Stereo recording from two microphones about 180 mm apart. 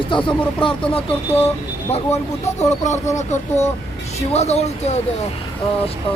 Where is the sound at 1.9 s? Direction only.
35° left (ahead or behind).